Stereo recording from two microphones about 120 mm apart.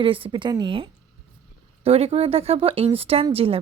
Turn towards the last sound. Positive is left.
turn(degrees=-50)  # may be behind; listen again after turning